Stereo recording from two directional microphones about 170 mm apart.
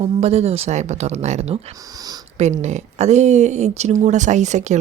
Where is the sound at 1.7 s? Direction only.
20° right (ahead or behind).